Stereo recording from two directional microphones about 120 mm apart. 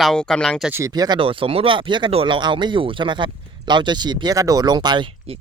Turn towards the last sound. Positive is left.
turn(degrees=-40)  # may be behind; listen again after turning